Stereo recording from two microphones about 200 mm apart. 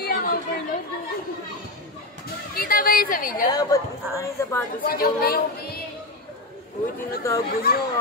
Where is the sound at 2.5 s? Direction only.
45° left (ahead or behind).